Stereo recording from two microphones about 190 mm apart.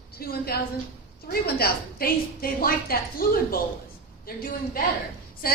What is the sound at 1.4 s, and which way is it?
A woman's voice, 55° left (ahead or behind).